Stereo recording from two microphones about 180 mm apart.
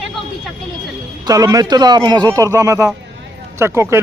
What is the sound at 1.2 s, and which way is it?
Speech, 20° right (ahead or behind).